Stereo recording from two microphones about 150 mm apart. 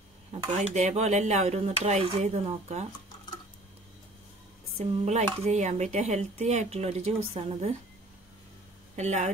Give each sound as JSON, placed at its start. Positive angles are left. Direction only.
{"t": 0.3, "sound": "speech", "side_deg": -45}
{"t": 4.7, "sound": "speech", "side_deg": -45}
{"t": 8.9, "sound": "speech", "side_deg": -50}